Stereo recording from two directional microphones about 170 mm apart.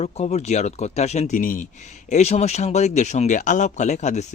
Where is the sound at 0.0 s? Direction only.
40° left (ahead or behind).